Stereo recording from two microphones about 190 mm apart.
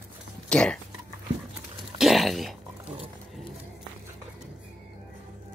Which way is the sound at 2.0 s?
Centre (ahead or behind).